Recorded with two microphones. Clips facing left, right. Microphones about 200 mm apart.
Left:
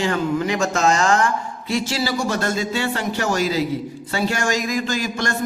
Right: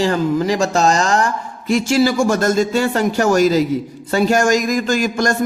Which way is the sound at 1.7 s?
45° right (ahead or behind).